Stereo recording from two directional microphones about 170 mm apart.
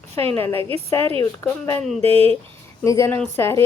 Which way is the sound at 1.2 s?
15° left (ahead or behind).